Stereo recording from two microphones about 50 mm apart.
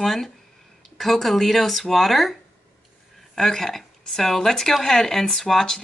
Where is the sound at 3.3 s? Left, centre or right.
Centre.